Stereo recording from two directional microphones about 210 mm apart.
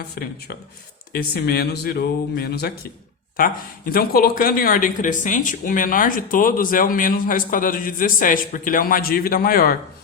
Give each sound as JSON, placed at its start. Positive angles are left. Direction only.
{"t": 1.1, "sound": "speech", "side_deg": 45}